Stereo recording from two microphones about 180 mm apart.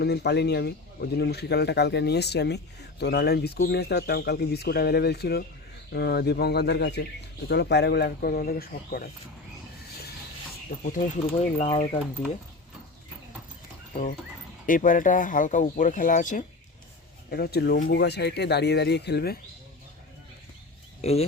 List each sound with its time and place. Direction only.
0.0 s speech: 65° left (ahead or behind)
11.5 s speech: 40° left (ahead or behind)
13.9 s a sound: 50° left (ahead or behind)
14.7 s speech: 45° left (ahead or behind)
17.3 s speech: 60° left (ahead or behind)
21.0 s speech: 35° left (ahead or behind)